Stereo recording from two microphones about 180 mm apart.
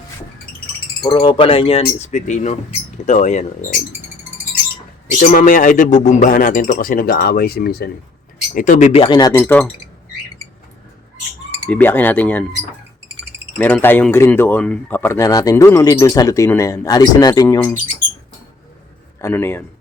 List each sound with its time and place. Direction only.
1.0 s speech: 25° left (ahead or behind); by 3.8 s 40° left (ahead or behind)
5.2 s speech: 50° left (ahead or behind)
8.5 s speech: 45° left (ahead or behind); by 9.3 s 25° left (ahead or behind)
9.4 s speech: 10° left (ahead or behind)
11.7 s speech: 10° left (ahead or behind)
13.6 s speech: 10° left (ahead or behind)
19.2 s speech: 10° left (ahead or behind)